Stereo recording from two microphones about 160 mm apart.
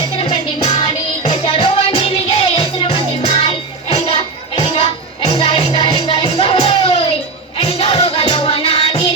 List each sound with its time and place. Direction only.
0.2 s music: 30° left (ahead or behind)